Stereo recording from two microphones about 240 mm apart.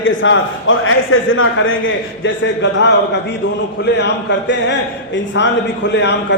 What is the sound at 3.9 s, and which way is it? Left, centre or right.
A man's voice, left.